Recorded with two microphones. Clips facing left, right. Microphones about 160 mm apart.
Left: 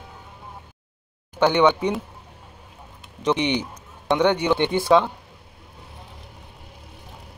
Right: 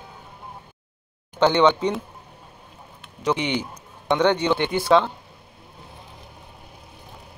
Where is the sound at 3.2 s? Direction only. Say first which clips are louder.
Left 2 dB; 20° left (ahead or behind).